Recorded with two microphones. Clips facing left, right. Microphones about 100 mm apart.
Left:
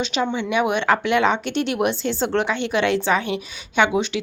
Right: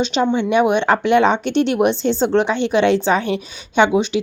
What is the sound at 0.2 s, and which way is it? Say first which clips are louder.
Speech: right 5 dB; 35° right (ahead or behind).